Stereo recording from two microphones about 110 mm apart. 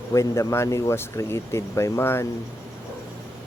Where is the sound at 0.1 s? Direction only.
30° left (ahead or behind).